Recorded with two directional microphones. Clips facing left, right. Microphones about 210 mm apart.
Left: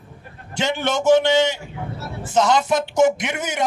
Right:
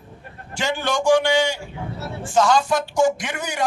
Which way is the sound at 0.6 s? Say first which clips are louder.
Left 1 dB; 20° left (ahead or behind).